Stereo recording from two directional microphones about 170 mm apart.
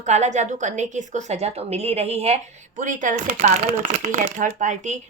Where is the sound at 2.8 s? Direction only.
50° right (ahead or behind).